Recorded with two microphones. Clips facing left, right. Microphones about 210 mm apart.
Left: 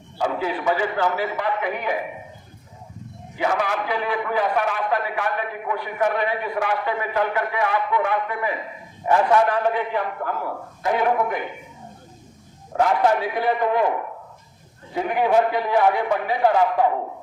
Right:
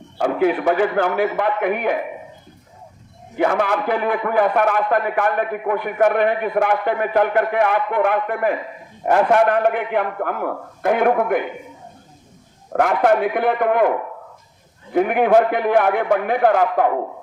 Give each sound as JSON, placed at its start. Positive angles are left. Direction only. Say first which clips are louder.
{"t": 0.2, "sound": "a man's voice", "louder": "right 7 dB", "side_deg": -55}
{"t": 3.3, "sound": "a man's voice", "louder": "right 5 dB", "side_deg": -55}
{"t": 12.7, "sound": "a man's voice", "louder": "right 3 dB", "side_deg": -60}
{"t": 14.9, "sound": "a man's voice", "louder": "right 5 dB", "side_deg": -55}